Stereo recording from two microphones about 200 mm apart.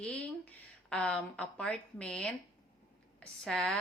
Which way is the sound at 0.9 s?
5° left (ahead or behind).